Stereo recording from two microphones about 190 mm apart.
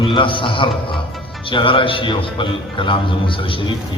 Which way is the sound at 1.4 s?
25° left (ahead or behind).